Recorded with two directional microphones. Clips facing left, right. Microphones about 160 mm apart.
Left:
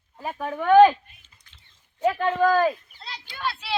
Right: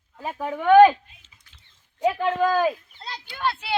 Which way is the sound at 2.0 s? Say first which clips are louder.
Even; 15° right (ahead or behind).